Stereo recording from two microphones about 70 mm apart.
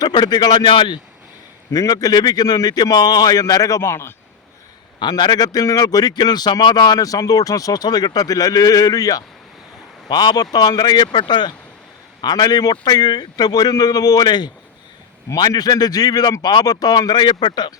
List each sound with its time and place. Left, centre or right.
0.0 s a man's voice: left
1.7 s a man's voice: left
4.9 s a man's voice: left
10.1 s speech: left
12.2 s a man's voice: left
15.4 s a man's voice: left